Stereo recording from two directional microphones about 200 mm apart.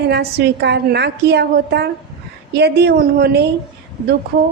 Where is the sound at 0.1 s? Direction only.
55° right (ahead or behind).